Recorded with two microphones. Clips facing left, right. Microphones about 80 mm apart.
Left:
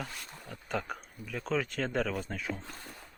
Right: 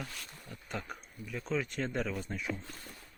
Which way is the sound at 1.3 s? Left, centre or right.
Left.